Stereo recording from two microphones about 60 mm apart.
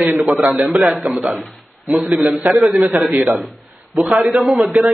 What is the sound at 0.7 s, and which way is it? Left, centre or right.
Speech, centre.